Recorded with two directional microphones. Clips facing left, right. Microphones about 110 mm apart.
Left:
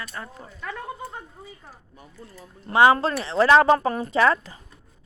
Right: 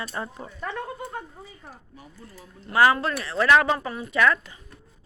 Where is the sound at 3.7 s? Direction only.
40° left (ahead or behind).